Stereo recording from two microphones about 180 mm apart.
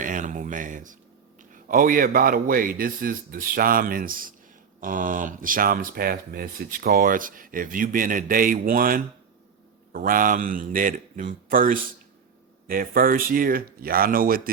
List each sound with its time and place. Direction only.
0.0 s speech: 45° right (ahead or behind)